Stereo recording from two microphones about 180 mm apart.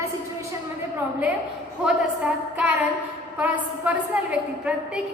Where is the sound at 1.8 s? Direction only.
5° right (ahead or behind).